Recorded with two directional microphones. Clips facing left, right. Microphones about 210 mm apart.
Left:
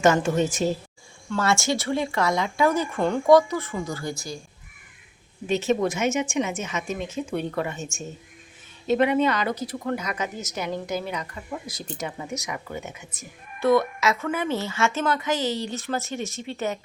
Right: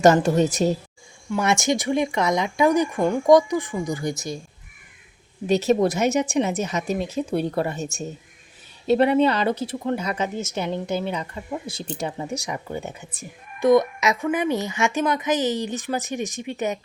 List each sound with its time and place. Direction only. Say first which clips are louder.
0.0 s speech: right 4 dB; 35° right (ahead or behind)
1.3 s a woman's voice: right 2 dB; 20° right (ahead or behind)
5.5 s speech: right 4 dB; 40° right (ahead or behind)
13.6 s a woman's voice: right 3 dB; 15° right (ahead or behind)